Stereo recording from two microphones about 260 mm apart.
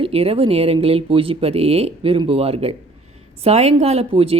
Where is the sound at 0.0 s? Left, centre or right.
Right.